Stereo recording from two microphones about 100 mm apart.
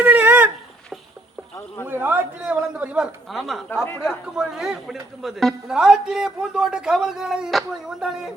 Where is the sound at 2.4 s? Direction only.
10° right (ahead or behind).